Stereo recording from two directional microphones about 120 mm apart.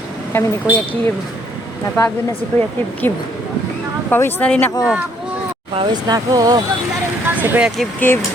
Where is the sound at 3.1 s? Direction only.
25° left (ahead or behind).